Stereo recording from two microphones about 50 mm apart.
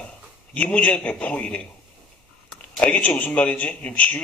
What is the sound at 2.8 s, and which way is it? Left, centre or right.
A man's voice, left.